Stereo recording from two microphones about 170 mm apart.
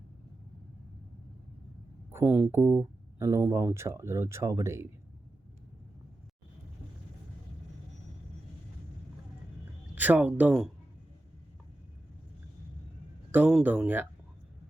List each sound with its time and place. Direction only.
2.1 s speech: 10° right (ahead or behind)
9.9 s speech: 10° right (ahead or behind)
13.5 s speech: 10° right (ahead or behind)